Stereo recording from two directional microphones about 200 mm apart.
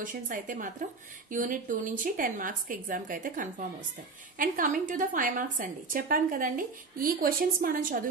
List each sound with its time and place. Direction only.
0.0 s a woman's voice: 40° right (ahead or behind)